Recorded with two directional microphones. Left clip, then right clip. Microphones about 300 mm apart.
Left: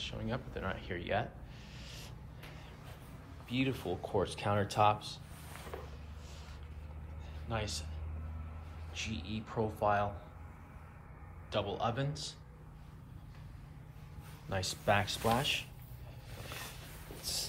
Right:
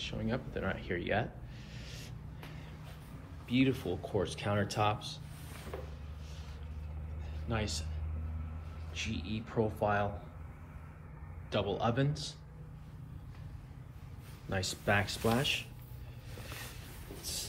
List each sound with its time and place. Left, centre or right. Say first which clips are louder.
0.0 s speech: right 2 dB; centre
3.4 s speech: right 4 dB; centre
7.4 s speech: right 1 dB; centre
8.9 s speech: right 2 dB; centre
11.5 s speech: right 2 dB; centre
14.5 s speech: even; centre
17.2 s a sound: left 3 dB; centre